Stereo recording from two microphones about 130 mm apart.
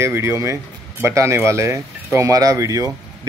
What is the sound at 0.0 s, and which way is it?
Speech, 20° right (ahead or behind).